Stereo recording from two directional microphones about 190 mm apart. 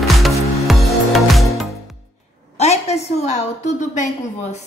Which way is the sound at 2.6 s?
35° left (ahead or behind).